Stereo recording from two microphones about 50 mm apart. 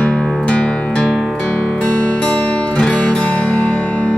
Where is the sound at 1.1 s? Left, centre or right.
Centre.